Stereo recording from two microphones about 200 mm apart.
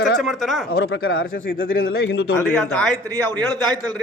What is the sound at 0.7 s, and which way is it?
A man's voice, 50° left (ahead or behind).